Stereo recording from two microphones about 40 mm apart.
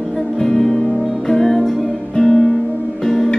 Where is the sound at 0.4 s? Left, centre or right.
Centre.